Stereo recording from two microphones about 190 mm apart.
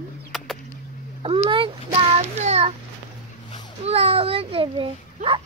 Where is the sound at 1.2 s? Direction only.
30° right (ahead or behind).